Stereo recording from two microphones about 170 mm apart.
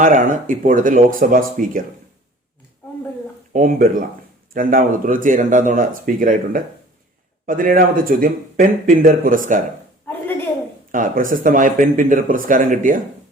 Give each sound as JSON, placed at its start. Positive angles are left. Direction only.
{"t": 0.0, "sound": "speech", "side_deg": -50}
{"t": 3.5, "sound": "speech", "side_deg": -50}
{"t": 10.1, "sound": "a sound", "side_deg": 10}
{"t": 10.9, "sound": "speech", "side_deg": -50}